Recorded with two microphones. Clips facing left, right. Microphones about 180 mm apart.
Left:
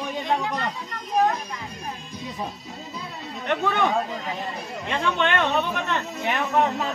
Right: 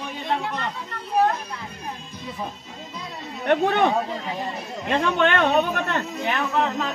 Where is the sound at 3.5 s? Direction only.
55° right (ahead or behind).